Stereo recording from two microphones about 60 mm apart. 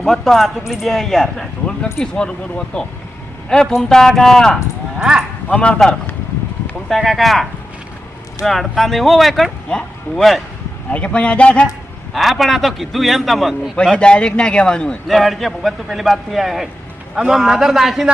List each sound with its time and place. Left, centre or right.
0.0 s a man's voice: centre
4.9 s speech: centre
5.5 s a man's voice: centre
6.8 s a man's voice: centre
8.4 s a man's voice: centre
10.9 s a man's voice: left
12.1 s a man's voice: centre
13.8 s speech: centre
15.0 s a man's voice: centre